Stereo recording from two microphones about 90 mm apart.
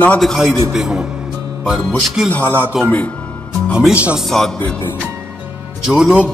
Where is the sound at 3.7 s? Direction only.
10° right (ahead or behind).